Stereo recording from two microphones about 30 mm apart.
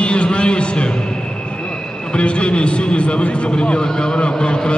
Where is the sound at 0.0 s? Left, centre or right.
Left.